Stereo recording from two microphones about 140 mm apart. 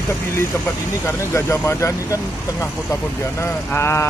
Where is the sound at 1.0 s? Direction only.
20° left (ahead or behind).